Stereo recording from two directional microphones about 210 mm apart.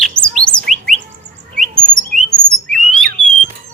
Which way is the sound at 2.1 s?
35° right (ahead or behind).